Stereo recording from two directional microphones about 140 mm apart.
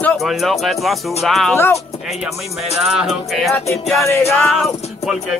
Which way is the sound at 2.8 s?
Centre (ahead or behind).